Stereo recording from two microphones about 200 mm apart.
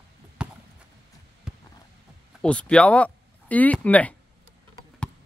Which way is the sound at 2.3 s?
5° left (ahead or behind).